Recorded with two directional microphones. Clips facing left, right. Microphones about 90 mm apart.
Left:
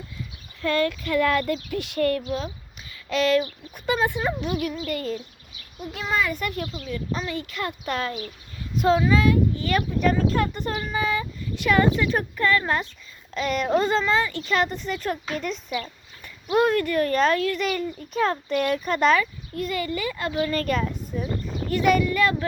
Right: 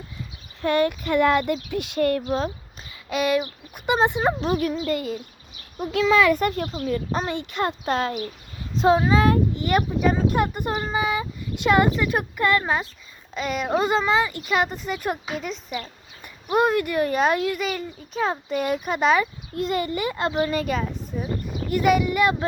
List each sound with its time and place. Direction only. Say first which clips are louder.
0.6 s speech: right 2 dB; 20° right (ahead or behind)
2.2 s speech: right 4 dB; 45° right (ahead or behind)
3.1 s speech: left 1 dB; 10° right (ahead or behind)
3.8 s speech: right 3 dB; 25° right (ahead or behind)
5.9 s speech: right 8 dB; 90° right
6.3 s speech: right 6 dB; 40° right (ahead or behind)
7.3 s speech: right 4 dB; 25° right (ahead or behind)
13.3 s speech: left 1 dB; 5° right (ahead or behind)
17.6 s speech: left 2 dB; 5° right (ahead or behind)
19.2 s speech: right 2 dB; 25° right (ahead or behind)
20.5 s speech: even; 5° right (ahead or behind)